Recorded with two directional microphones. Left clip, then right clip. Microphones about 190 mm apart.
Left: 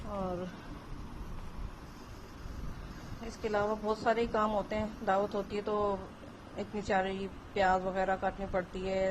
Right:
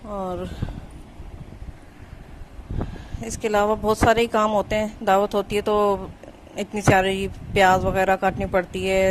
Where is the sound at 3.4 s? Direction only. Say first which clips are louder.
Right 12 dB; 50° right (ahead or behind).